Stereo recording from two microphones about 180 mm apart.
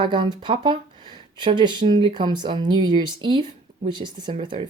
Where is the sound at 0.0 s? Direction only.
25° right (ahead or behind).